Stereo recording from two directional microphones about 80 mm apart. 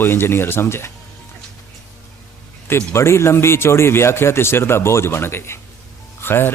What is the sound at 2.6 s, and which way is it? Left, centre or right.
Speech, left.